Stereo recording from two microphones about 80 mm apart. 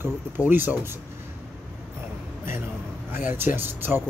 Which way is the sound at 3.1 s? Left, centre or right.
Right.